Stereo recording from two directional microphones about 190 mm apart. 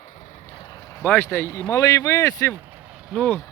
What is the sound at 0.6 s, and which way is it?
Speech, 20° left (ahead or behind).